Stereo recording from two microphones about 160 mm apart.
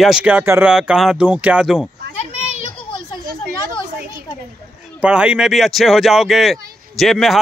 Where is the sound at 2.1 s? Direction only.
40° left (ahead or behind).